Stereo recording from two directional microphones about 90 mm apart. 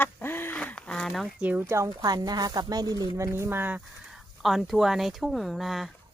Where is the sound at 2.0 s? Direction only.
45° right (ahead or behind).